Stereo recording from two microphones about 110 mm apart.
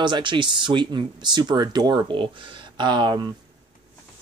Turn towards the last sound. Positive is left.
turn(degrees=-40)  # may be behind; listen again after turning